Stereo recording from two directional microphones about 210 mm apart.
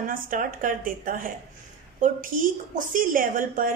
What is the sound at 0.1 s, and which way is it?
A woman's voice, 40° right (ahead or behind).